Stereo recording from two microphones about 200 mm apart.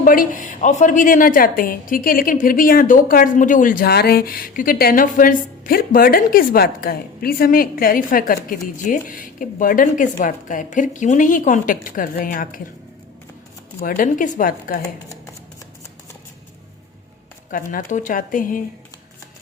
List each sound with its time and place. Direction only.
0.0 s a woman's voice: 45° left (ahead or behind)
13.8 s a woman's voice: 40° left (ahead or behind)
17.5 s speech: 40° left (ahead or behind)